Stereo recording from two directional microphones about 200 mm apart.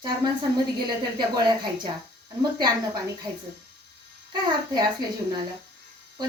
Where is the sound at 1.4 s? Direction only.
25° right (ahead or behind).